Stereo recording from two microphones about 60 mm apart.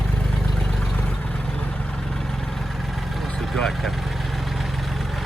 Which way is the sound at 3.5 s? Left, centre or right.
Centre.